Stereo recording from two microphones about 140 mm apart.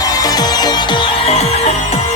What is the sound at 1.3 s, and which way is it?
Music, 50° left (ahead or behind).